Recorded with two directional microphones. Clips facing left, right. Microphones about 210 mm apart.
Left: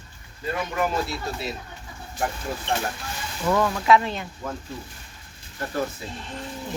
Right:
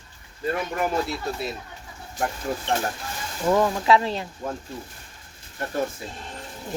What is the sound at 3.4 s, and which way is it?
Speech, 25° right (ahead or behind).